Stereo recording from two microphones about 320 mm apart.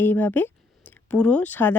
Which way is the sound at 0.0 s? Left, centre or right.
Centre.